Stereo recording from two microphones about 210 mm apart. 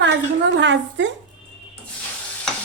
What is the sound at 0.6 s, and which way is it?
Speech, 60° right (ahead or behind).